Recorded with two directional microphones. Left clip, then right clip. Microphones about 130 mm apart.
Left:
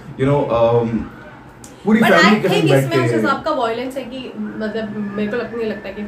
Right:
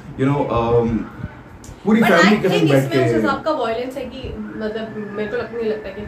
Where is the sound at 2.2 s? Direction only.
25° left (ahead or behind).